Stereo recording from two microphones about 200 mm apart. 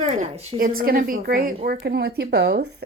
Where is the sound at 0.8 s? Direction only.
45° right (ahead or behind).